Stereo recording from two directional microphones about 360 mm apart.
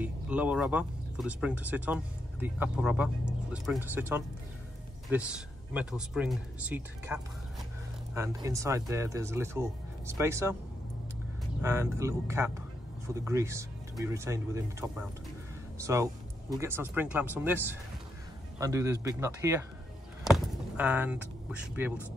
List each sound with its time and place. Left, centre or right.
0.0 s speech: centre
11.6 s speech: centre
20.2 s a sound: centre